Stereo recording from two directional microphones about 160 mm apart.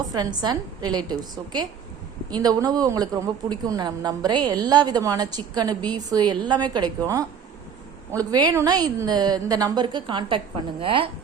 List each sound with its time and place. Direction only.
0.1 s speech: 25° right (ahead or behind)